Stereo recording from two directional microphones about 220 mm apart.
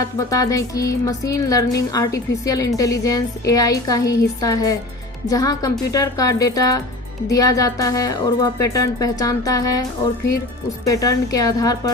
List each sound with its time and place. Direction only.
0.3 s speech: 15° left (ahead or behind)
10.8 s speech: 15° left (ahead or behind)